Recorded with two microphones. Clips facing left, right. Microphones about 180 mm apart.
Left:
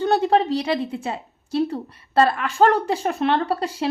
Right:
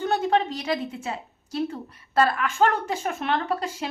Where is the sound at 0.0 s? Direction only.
35° left (ahead or behind).